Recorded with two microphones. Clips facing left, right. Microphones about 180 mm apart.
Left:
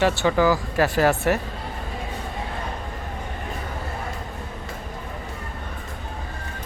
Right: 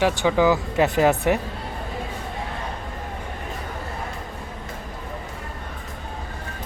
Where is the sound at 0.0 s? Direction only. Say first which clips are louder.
Even; 15° right (ahead or behind).